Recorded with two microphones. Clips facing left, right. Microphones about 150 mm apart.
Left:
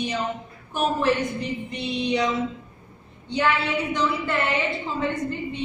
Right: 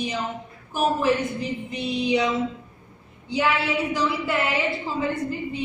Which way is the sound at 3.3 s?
5° right (ahead or behind).